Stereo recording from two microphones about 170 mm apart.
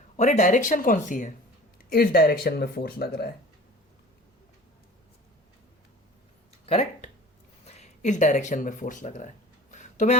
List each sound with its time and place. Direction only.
0.2 s speech: 45° left (ahead or behind)
1.9 s speech: 60° left (ahead or behind)
6.7 s speech: 40° left (ahead or behind)
9.7 s a sound: 45° left (ahead or behind)